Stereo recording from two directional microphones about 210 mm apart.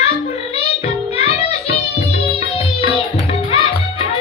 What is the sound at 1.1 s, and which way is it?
Music, 30° left (ahead or behind).